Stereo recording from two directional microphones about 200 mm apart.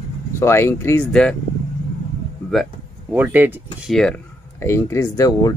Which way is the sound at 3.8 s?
5° left (ahead or behind).